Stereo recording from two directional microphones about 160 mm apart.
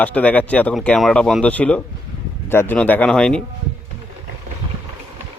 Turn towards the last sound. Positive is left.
turn(degrees=5)  # may be behind; listen again after turning